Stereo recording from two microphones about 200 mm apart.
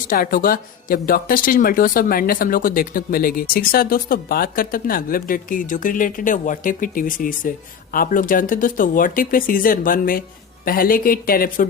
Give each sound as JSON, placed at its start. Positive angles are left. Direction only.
{"t": 0.0, "sound": "speech", "side_deg": 45}